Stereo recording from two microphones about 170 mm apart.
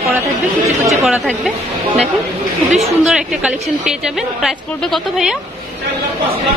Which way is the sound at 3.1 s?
5° right (ahead or behind).